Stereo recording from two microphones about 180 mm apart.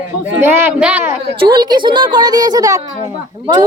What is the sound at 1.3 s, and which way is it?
Speech, 25° right (ahead or behind).